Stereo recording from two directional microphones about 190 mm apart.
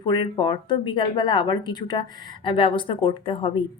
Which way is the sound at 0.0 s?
25° left (ahead or behind).